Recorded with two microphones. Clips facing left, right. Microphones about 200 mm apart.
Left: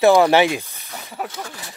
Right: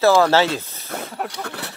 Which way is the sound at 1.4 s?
65° right (ahead or behind).